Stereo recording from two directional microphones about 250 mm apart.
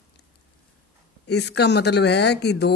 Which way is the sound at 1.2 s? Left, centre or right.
Left.